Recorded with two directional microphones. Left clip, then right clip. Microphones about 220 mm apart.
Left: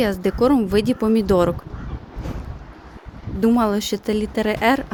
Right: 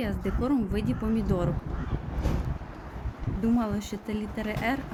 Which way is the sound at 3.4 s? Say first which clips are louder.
Left 11 dB; 50° left (ahead or behind).